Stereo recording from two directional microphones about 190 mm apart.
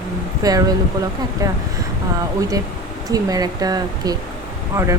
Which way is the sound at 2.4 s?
20° right (ahead or behind).